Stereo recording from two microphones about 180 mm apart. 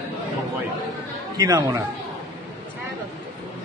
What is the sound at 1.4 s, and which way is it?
Speech, 15° right (ahead or behind).